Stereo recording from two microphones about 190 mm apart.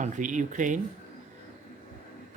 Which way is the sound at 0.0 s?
40° right (ahead or behind).